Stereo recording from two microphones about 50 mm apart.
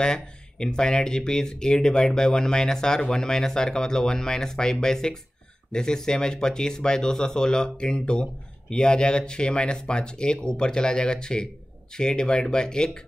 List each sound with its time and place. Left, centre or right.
0.0 s speech: centre